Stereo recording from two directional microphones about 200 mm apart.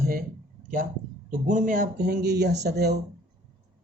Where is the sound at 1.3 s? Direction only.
40° right (ahead or behind).